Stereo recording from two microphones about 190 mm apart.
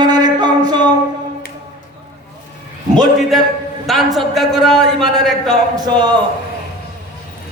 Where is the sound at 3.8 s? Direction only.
Centre (ahead or behind).